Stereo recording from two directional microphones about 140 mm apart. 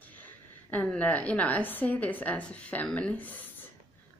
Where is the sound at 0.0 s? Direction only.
10° left (ahead or behind).